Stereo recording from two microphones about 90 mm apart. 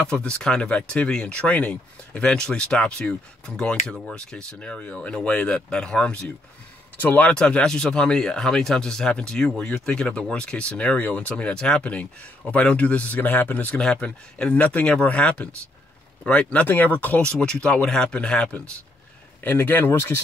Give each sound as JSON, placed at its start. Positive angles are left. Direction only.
{"t": 0.0, "sound": "speech", "side_deg": 10}